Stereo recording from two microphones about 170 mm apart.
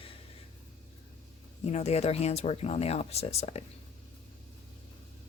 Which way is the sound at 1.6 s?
40° left (ahead or behind).